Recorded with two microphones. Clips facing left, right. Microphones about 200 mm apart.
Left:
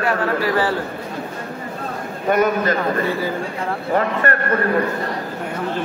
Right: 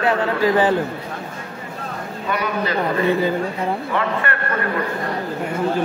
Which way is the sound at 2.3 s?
45° left (ahead or behind).